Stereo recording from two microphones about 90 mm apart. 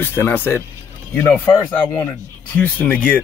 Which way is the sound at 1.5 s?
45° left (ahead or behind).